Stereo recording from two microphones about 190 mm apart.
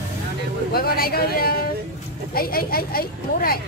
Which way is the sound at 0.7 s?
55° left (ahead or behind).